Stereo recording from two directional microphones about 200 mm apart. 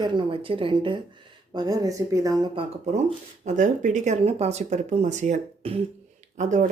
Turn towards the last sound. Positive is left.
turn(degrees=-40)  # may be behind; listen again after turning